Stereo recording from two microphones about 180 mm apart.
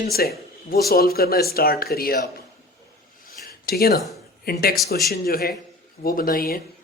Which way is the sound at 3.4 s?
55° left (ahead or behind).